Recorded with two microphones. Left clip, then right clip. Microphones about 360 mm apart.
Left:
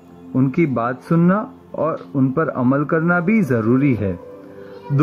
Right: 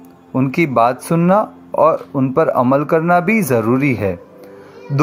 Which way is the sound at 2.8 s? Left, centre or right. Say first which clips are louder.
Right 5 dB; centre.